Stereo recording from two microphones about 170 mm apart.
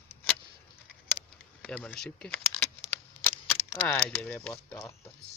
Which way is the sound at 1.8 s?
5° left (ahead or behind).